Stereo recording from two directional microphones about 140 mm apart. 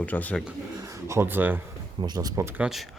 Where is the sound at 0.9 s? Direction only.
20° right (ahead or behind).